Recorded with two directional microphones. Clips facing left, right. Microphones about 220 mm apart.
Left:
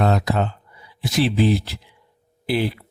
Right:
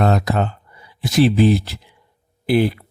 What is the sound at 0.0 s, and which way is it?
Speech, 50° right (ahead or behind).